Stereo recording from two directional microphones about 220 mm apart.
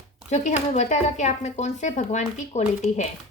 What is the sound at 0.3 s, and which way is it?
Speech, 30° left (ahead or behind).